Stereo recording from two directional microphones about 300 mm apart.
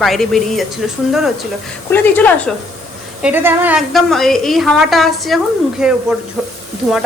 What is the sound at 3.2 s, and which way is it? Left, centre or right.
A woman's voice, centre.